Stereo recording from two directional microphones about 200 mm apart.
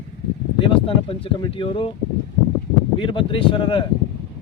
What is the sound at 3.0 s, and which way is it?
Speech, 25° left (ahead or behind).